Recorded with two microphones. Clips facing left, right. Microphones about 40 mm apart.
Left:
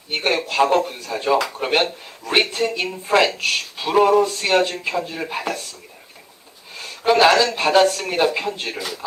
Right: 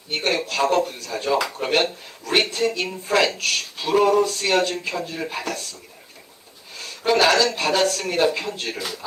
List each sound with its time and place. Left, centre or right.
0.1 s speech: centre
1.4 s speech: centre
1.6 s speech: centre
6.7 s speech: centre